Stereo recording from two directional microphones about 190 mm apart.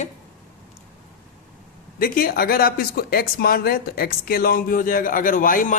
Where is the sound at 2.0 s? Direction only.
50° left (ahead or behind).